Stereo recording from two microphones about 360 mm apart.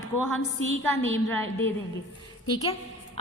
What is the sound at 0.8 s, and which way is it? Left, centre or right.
Speech, centre.